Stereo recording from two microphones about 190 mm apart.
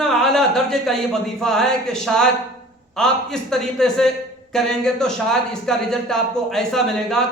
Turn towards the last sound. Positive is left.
turn(degrees=5)  # may be behind; listen again after turning